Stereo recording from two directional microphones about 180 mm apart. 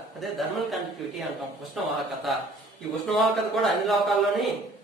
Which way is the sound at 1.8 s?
Centre (ahead or behind).